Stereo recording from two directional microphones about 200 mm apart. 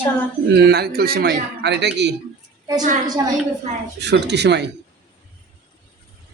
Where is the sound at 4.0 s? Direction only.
55° right (ahead or behind).